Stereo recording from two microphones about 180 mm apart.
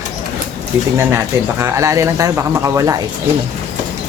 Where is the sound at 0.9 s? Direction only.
15° right (ahead or behind).